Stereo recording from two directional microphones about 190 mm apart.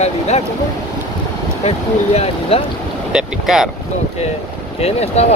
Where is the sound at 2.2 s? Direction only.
30° left (ahead or behind).